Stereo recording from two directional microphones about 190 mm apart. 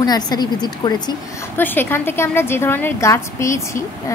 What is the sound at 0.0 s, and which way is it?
A child's voice, 20° left (ahead or behind).